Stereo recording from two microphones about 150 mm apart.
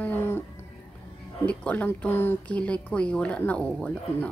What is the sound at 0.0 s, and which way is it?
Cat, 15° left (ahead or behind).